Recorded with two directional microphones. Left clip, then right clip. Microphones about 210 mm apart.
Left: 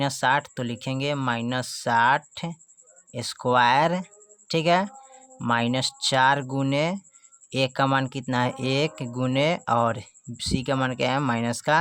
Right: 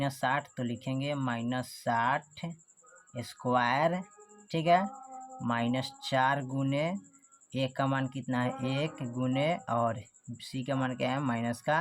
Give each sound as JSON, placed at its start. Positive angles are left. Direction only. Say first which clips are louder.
{"t": 0.0, "sound": "a woman's voice", "louder": "left 8 dB", "side_deg": 40}